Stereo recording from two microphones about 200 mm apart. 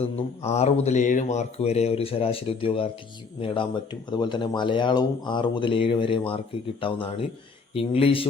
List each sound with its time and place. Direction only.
0.0 s speech: 35° left (ahead or behind)